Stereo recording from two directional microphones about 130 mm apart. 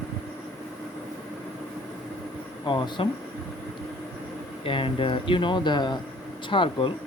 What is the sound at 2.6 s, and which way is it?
Speech, 40° left (ahead or behind).